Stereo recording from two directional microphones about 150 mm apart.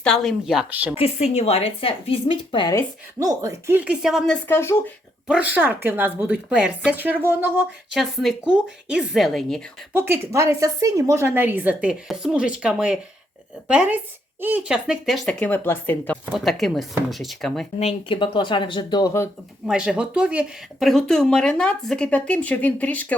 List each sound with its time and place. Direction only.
0.0 s speech: 5° left (ahead or behind)
0.9 s speech: 45° left (ahead or behind)
3.2 s speech: 25° right (ahead or behind)
3.7 s speech: 10° right (ahead or behind)
4.4 s speech: 15° left (ahead or behind)
5.3 s a woman's voice: 10° right (ahead or behind)
7.9 s speech: centre (ahead or behind)
9.9 s a woman's voice: 20° right (ahead or behind); by 16.1 s 15° left (ahead or behind)
16.3 s speech: centre (ahead or behind)
17.7 s speech: 40° left (ahead or behind); by 19.3 s 20° left (ahead or behind)
19.6 s speech: 5° right (ahead or behind)